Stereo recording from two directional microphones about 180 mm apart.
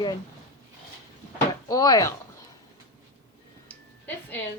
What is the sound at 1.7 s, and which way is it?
Speech, 20° left (ahead or behind).